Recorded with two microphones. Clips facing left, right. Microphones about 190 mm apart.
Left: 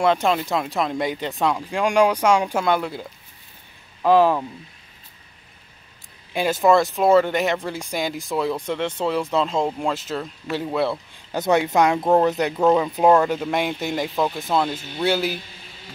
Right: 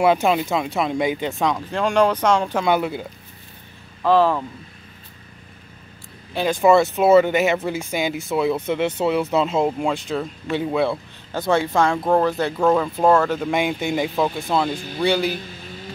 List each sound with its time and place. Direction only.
0.0 s speech: 10° right (ahead or behind); by 2.6 s 10° left (ahead or behind)
2.6 s speech: 5° right (ahead or behind)
4.0 s speech: 15° left (ahead or behind)
6.3 s speech: 5° left (ahead or behind)
11.3 s speech: 20° left (ahead or behind)
13.4 s speech: centre (ahead or behind)